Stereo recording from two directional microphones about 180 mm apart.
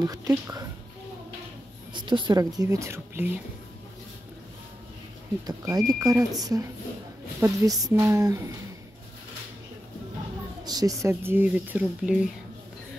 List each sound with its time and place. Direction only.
0.0 s a woman's voice: 20° right (ahead or behind)
2.0 s a woman's voice: 25° right (ahead or behind)
5.5 s a woman's voice: 20° right (ahead or behind)
10.6 s speech: 20° right (ahead or behind); by 12.3 s 5° right (ahead or behind)